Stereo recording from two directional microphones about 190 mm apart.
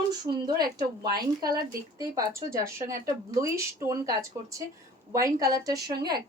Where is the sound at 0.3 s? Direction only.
20° right (ahead or behind).